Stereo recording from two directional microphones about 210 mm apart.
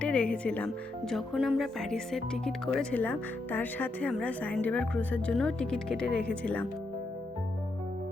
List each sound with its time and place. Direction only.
0.0 s speech: 5° left (ahead or behind)